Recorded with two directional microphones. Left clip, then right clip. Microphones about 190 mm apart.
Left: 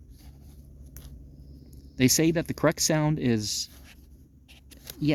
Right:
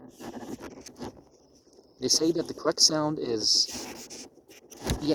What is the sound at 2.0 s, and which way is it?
Speech, 40° left (ahead or behind).